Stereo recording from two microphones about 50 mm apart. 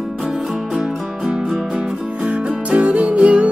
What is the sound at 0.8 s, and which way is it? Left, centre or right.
Music, centre.